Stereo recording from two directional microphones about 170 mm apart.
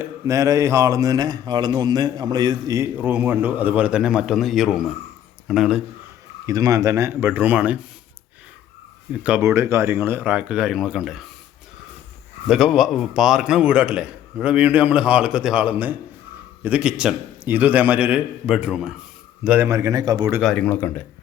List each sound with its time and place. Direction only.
0.0 s a man's voice: 20° right (ahead or behind); by 5.8 s centre (ahead or behind)
6.4 s speech: 20° right (ahead or behind)
9.2 s speech: 10° right (ahead or behind)
12.5 s a man's voice: centre (ahead or behind); by 20.4 s 25° right (ahead or behind)
20.4 s speech: 5° left (ahead or behind)